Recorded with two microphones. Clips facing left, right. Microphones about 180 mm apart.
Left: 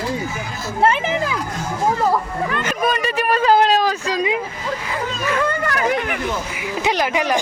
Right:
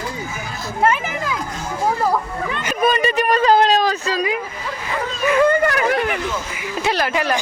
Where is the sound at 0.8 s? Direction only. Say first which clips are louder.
Left 2 dB; 25° left (ahead or behind).